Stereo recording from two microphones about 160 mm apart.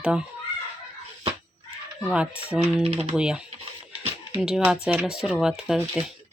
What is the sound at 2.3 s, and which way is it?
Speech, 5° right (ahead or behind).